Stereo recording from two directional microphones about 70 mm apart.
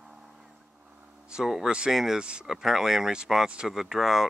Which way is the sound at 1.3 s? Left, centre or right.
Centre.